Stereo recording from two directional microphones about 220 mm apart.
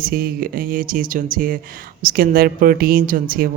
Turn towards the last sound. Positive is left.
turn(degrees=-40)  # may be behind; listen again after turning